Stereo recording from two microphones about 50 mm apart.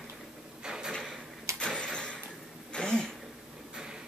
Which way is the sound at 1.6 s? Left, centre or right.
Centre.